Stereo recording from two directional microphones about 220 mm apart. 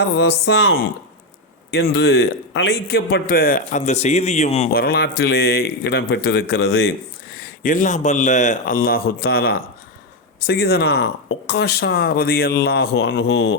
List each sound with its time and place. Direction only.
0.0 s a man's voice: 50° left (ahead or behind); by 4.7 s 30° left (ahead or behind)
4.7 s a man's voice: 45° left (ahead or behind)